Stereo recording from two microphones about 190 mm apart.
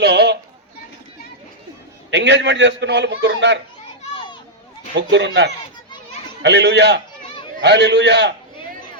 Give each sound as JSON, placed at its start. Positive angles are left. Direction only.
{"t": 0.0, "sound": "a sound", "side_deg": -60}
{"t": 2.0, "sound": "a man's voice", "side_deg": -65}
{"t": 4.9, "sound": "a man's voice", "side_deg": -65}